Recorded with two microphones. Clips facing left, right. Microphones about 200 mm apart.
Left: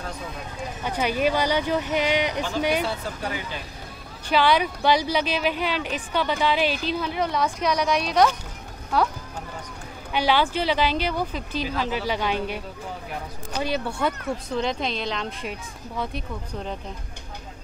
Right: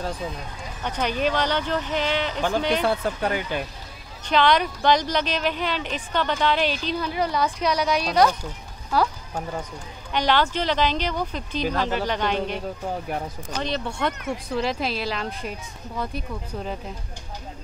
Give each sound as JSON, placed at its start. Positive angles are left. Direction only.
{"t": 0.8, "sound": "speech", "side_deg": 10}
{"t": 2.8, "sound": "speech", "side_deg": -55}
{"t": 4.3, "sound": "a woman's voice", "side_deg": 5}
{"t": 10.1, "sound": "speech", "side_deg": 10}
{"t": 13.6, "sound": "a woman's voice", "side_deg": 5}